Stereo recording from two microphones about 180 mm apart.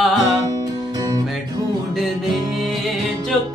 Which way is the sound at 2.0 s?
Centre (ahead or behind).